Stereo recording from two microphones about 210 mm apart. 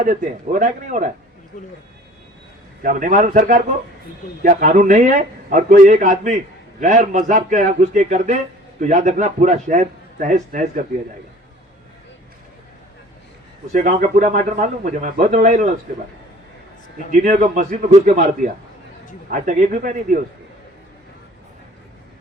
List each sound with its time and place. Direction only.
0.0 s a man's voice: 40° right (ahead or behind)
2.8 s a man's voice: 40° right (ahead or behind)
13.7 s a man's voice: 40° right (ahead or behind)
17.1 s a man's voice: 40° right (ahead or behind)